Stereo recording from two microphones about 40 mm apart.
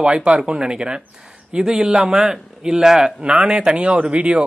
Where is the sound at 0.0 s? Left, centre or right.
Right.